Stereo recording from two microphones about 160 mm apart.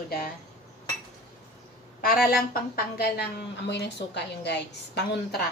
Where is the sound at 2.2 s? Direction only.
70° left (ahead or behind); by 4.5 s 90° left.